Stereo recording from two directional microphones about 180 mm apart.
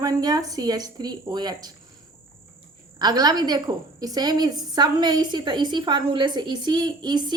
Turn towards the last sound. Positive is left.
turn(degrees=-25)  # may be behind; listen again after turning